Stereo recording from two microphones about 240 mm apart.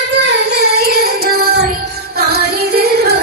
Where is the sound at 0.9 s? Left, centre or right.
Right.